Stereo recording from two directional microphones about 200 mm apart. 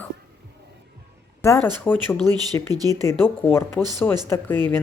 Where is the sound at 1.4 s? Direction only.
10° left (ahead or behind).